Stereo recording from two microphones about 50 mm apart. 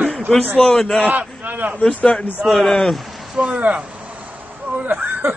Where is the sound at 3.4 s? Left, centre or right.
Right.